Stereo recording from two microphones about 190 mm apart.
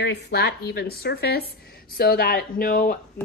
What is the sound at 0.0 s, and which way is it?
A woman's voice, 60° left (ahead or behind).